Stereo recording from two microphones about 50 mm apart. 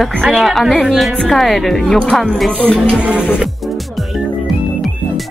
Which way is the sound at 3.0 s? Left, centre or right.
Right.